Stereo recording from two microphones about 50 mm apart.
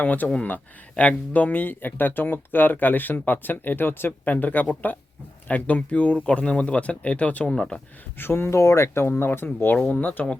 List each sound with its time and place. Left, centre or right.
0.0 s speech: left
4.3 s speech: left; by 7.8 s centre
8.2 s speech: left
8.5 s speech: left
9.9 s speech: left